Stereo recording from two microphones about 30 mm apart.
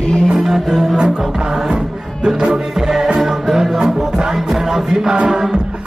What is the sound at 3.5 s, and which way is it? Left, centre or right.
Music, centre.